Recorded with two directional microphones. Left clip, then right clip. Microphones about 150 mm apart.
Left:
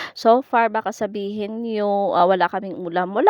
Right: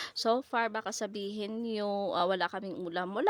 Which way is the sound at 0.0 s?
55° left (ahead or behind).